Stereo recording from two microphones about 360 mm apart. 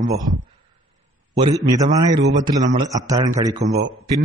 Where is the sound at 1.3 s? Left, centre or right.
Centre.